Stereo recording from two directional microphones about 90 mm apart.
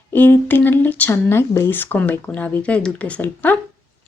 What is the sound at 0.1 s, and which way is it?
A woman's voice, 20° left (ahead or behind).